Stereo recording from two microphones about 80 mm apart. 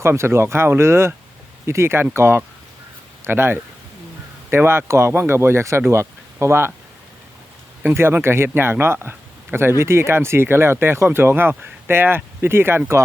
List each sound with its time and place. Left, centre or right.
0.0 s a man's voice: right
7.9 s a man's voice: right